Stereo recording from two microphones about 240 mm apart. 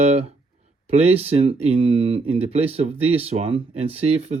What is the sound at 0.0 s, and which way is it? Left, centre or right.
Speech, right.